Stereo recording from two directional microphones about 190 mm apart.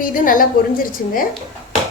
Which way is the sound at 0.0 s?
45° left (ahead or behind).